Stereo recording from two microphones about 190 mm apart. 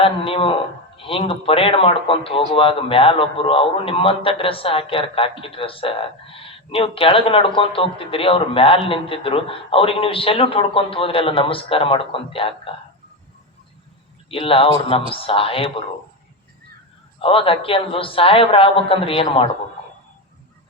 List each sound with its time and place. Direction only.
0.0 s speech: 30° left (ahead or behind)
14.3 s speech: 30° left (ahead or behind)
17.2 s speech: 30° left (ahead or behind)